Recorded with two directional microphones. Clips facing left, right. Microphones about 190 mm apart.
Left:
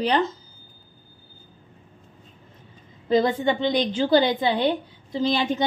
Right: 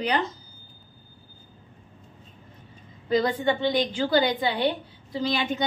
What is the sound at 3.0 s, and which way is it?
A woman's voice, 25° left (ahead or behind).